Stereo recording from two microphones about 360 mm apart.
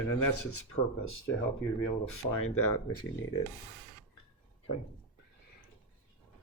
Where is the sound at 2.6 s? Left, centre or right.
Left.